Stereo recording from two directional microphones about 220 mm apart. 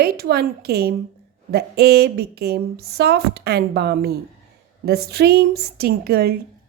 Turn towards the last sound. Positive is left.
turn(degrees=-45)  # may be behind; listen again after turning